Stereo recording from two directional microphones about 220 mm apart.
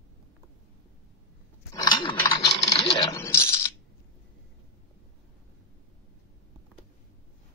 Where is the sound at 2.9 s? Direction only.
10° left (ahead or behind).